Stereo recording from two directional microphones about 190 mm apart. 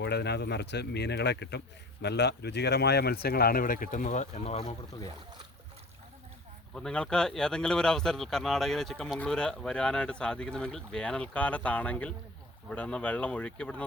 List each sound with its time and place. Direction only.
0.0 s speech: 60° left (ahead or behind); by 4.7 s 35° left (ahead or behind)
6.7 s speech: 5° left (ahead or behind)